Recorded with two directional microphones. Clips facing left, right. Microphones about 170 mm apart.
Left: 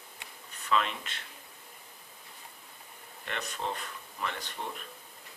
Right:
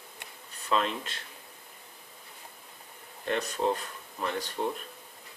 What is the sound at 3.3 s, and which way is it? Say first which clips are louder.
Speech: right 8 dB; 40° right (ahead or behind).